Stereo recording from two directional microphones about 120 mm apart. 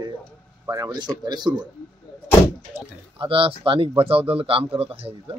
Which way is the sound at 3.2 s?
50° right (ahead or behind).